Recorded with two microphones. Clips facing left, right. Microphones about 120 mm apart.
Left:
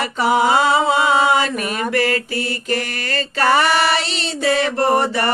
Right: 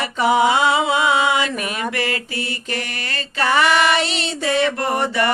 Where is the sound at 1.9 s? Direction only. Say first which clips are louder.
Left 5 dB; 40° left (ahead or behind).